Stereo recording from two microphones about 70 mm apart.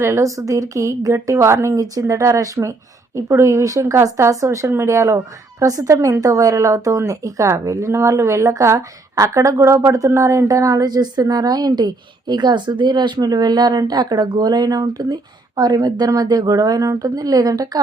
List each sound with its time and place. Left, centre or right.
0.0 s a woman's voice: right